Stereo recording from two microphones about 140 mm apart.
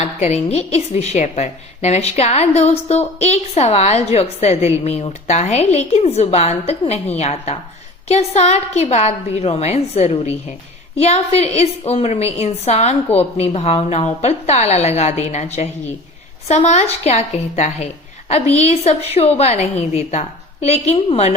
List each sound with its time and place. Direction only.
0.0 s a woman's voice: 50° left (ahead or behind)